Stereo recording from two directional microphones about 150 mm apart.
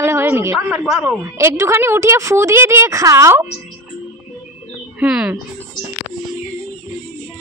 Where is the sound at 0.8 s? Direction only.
5° right (ahead or behind).